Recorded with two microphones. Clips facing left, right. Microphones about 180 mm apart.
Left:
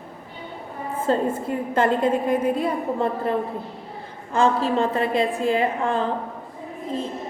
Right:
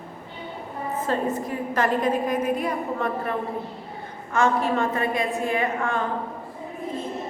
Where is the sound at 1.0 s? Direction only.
30° left (ahead or behind).